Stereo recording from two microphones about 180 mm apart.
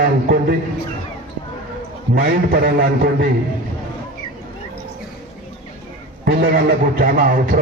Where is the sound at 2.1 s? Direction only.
55° right (ahead or behind).